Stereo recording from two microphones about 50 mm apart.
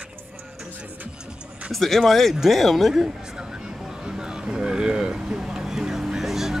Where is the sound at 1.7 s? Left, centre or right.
Centre.